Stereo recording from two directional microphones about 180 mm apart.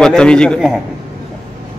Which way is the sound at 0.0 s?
5° left (ahead or behind).